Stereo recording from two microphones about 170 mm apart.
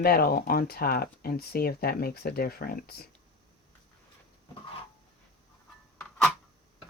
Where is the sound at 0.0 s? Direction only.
60° left (ahead or behind).